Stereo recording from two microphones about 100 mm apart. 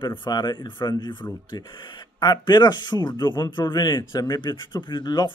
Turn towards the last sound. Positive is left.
turn(degrees=45)  # may be behind; listen again after turning